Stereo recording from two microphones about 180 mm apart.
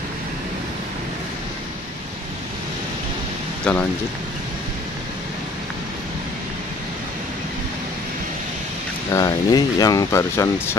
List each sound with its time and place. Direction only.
3.7 s speech: 5° left (ahead or behind)
9.1 s speech: 20° left (ahead or behind)